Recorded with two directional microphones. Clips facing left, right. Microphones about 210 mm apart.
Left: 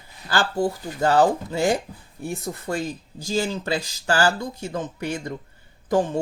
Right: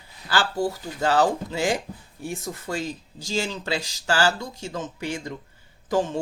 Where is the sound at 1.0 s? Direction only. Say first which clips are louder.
Left 3 dB; 45° left (ahead or behind).